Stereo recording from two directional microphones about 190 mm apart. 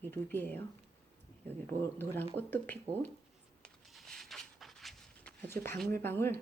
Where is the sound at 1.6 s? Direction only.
10° left (ahead or behind).